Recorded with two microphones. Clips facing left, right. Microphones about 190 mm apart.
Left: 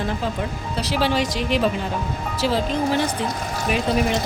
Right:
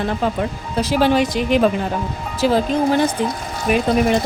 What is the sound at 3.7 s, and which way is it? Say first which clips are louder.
Speech: right 6 dB; 50° right (ahead or behind).